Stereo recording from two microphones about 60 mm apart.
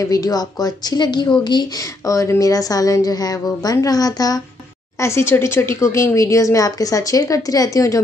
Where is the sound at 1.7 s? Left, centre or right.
Left.